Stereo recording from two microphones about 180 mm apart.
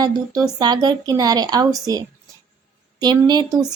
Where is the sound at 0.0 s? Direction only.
20° right (ahead or behind).